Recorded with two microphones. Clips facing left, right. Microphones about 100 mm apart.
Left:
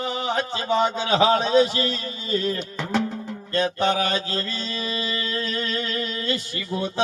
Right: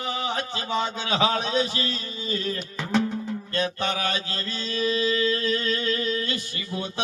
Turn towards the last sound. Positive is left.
turn(degrees=30)  # may be behind; listen again after turning